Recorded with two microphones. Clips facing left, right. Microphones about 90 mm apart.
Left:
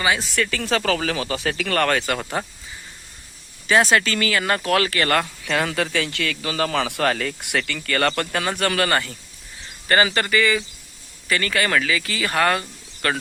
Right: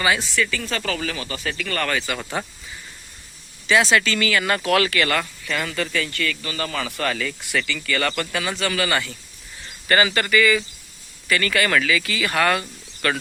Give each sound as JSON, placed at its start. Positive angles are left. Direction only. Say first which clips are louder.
{"t": 0.5, "sound": "a man's voice", "louder": "left 4 dB", "side_deg": 70}
{"t": 2.4, "sound": "speech", "louder": "left 1 dB", "side_deg": 35}
{"t": 3.9, "sound": "speech", "louder": "even", "side_deg": 40}
{"t": 5.1, "sound": "a man's voice", "louder": "left 3 dB", "side_deg": 70}
{"t": 9.9, "sound": "speech", "louder": "even", "side_deg": 30}